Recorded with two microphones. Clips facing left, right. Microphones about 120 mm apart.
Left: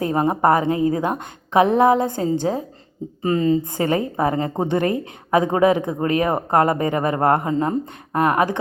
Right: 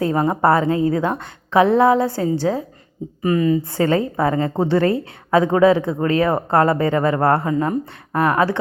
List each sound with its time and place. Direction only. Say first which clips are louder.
0.0 s a woman's voice: right 1 dB; 20° left (ahead or behind)
3.6 s a woman's voice: right 3 dB; 20° left (ahead or behind)